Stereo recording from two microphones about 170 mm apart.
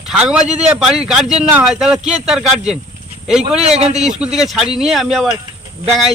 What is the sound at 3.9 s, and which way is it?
A man's voice, 5° right (ahead or behind).